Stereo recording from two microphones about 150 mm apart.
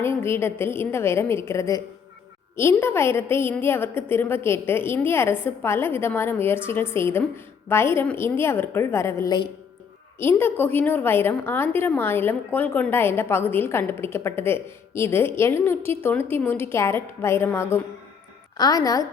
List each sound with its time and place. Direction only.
0.0 s a woman's voice: 15° left (ahead or behind)
10.2 s a woman's voice: 15° left (ahead or behind)